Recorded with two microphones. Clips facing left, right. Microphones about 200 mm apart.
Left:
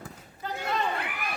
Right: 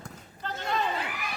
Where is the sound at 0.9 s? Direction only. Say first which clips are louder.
Even; 55° left (ahead or behind).